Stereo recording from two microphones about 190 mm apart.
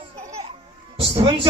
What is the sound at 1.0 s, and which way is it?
Speech, 25° right (ahead or behind).